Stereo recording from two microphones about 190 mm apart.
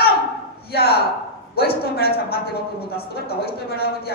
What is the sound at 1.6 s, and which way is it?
Speech, 55° left (ahead or behind).